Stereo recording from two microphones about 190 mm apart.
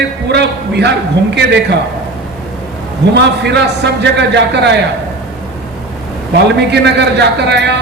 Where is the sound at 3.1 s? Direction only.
60° right (ahead or behind).